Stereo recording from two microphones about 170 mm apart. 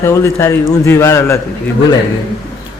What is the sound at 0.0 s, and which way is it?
A man's voice, 15° left (ahead or behind).